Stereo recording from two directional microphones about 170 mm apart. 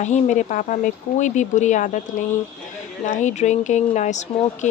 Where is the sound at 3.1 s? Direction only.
45° left (ahead or behind).